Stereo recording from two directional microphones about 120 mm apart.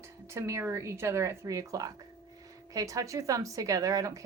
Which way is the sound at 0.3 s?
25° right (ahead or behind).